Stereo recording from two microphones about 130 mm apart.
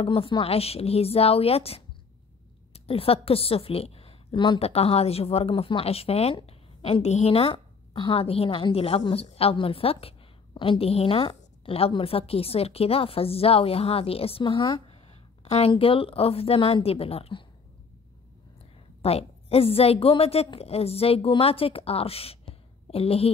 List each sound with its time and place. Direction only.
0.0 s a woman's voice: 45° left (ahead or behind)
4.6 s speech: 50° left (ahead or behind)
15.4 s speech: 55° left (ahead or behind)
19.0 s speech: 50° left (ahead or behind)
22.5 s a sound: 45° left (ahead or behind)